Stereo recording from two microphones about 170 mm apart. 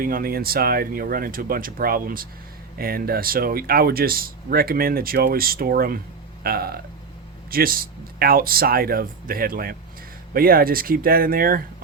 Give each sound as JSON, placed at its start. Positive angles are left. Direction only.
{"t": 0.0, "sound": "speech", "side_deg": -60}